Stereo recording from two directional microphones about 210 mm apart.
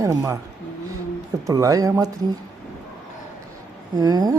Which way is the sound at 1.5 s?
15° right (ahead or behind).